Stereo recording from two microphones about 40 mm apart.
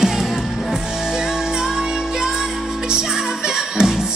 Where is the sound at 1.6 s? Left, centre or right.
Centre.